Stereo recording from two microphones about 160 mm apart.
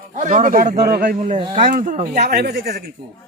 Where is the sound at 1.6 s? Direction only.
55° right (ahead or behind); by 2.8 s 90° right.